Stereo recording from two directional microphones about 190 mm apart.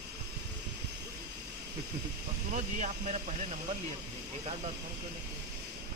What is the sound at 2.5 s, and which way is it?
Speech, 40° right (ahead or behind).